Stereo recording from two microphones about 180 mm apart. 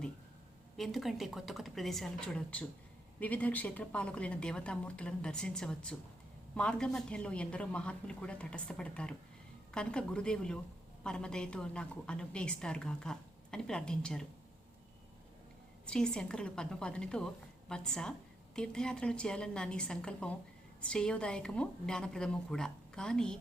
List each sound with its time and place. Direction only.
0.8 s a woman's voice: centre (ahead or behind)
15.9 s a woman's voice: 5° left (ahead or behind)